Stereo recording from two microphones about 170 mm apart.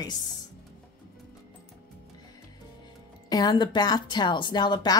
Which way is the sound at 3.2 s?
25° left (ahead or behind).